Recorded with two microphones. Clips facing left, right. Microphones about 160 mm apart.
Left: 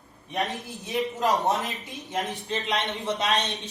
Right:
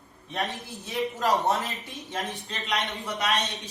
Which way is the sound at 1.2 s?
20° left (ahead or behind).